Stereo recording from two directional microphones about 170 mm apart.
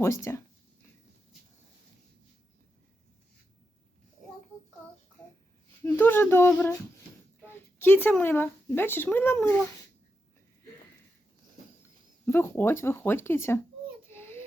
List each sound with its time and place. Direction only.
0.0 s speech: 15° left (ahead or behind)
5.8 s speech: 10° left (ahead or behind)
12.2 s speech: 10° left (ahead or behind)
14.1 s a sound: 15° left (ahead or behind)